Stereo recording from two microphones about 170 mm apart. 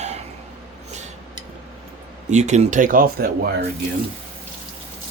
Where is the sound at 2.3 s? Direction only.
45° right (ahead or behind); by 3.3 s 60° right (ahead or behind).